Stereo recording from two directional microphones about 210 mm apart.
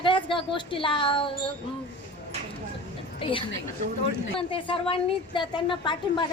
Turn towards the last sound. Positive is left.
turn(degrees=20)  # may be behind; listen again after turning